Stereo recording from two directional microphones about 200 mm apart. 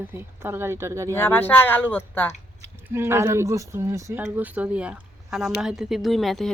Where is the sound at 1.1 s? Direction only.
10° left (ahead or behind).